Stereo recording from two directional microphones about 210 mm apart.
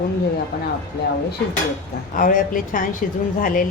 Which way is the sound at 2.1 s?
40° left (ahead or behind).